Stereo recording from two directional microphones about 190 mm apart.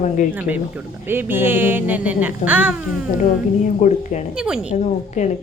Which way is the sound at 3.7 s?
40° left (ahead or behind).